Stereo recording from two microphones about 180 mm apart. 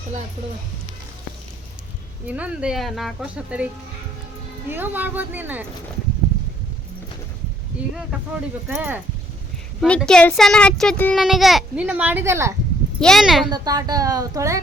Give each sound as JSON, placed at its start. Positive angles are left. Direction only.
{"t": 2.2, "sound": "speech", "side_deg": -5}
{"t": 4.7, "sound": "speech", "side_deg": -10}
{"t": 8.6, "sound": "speech", "side_deg": -5}
{"t": 13.0, "sound": "speech", "side_deg": 0}
{"t": 13.5, "sound": "speech", "side_deg": -20}